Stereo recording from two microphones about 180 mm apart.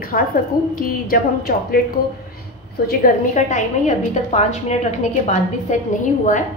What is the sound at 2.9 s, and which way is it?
A woman's voice, 45° left (ahead or behind).